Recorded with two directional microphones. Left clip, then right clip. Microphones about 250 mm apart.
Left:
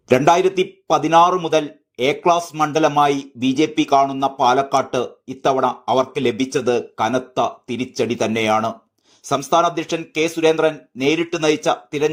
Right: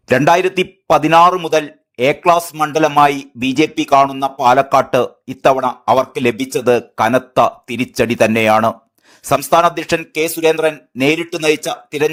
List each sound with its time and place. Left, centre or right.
0.1 s a man's voice: right